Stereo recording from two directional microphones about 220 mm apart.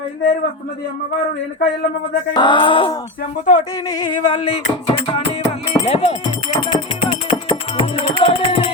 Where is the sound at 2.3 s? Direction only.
20° left (ahead or behind).